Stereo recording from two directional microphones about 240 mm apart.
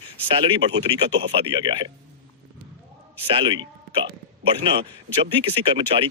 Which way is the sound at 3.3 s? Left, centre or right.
Right.